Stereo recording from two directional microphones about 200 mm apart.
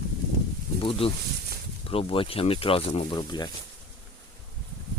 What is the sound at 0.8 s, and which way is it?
Snake, 30° left (ahead or behind).